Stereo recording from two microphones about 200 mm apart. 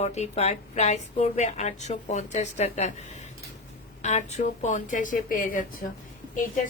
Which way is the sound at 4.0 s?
35° left (ahead or behind).